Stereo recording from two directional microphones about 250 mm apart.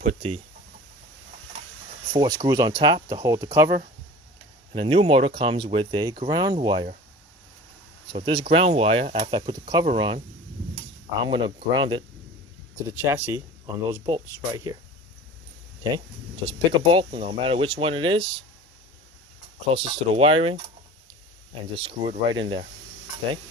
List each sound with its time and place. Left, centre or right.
0.0 s speech: right
2.1 s speech: centre
4.7 s speech: centre
8.0 s speech: centre
16.3 s speech: right
19.7 s speech: right